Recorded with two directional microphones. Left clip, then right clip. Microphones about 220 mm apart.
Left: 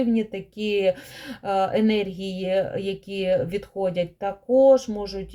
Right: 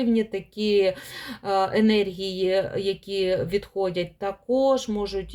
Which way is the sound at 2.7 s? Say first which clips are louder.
Right 2 dB; 45° right (ahead or behind).